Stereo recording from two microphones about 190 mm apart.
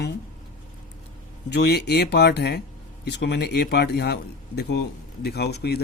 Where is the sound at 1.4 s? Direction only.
60° left (ahead or behind).